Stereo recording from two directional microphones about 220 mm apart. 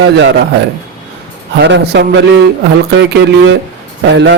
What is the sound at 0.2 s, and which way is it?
Speech, 50° right (ahead or behind).